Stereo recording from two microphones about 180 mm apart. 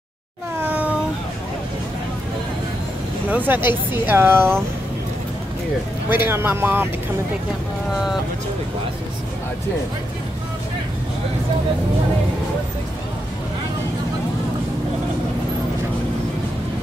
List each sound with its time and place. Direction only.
0.6 s cat: 10° right (ahead or behind)
3.3 s speech: 10° right (ahead or behind)
6.0 s speech: 10° right (ahead or behind)